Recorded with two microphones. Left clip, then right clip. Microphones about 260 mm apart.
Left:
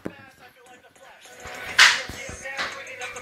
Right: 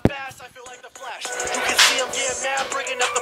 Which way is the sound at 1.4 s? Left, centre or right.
Right.